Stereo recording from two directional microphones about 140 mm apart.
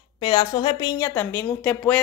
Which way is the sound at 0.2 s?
30° left (ahead or behind).